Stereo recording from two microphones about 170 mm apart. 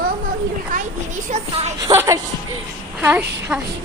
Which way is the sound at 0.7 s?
50° right (ahead or behind).